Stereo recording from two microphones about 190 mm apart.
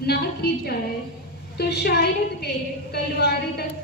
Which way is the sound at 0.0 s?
55° left (ahead or behind).